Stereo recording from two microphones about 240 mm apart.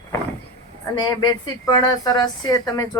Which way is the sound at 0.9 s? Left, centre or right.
Centre.